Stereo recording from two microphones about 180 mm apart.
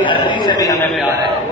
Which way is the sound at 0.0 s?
25° left (ahead or behind).